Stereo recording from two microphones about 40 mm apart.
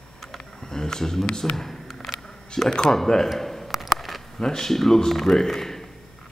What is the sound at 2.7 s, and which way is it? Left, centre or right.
Speech, left.